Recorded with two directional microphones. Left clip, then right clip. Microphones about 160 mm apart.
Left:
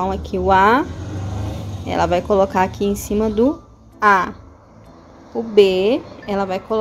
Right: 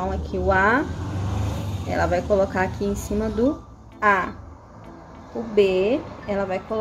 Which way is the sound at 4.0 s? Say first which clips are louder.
Left 5 dB; 45° left (ahead or behind).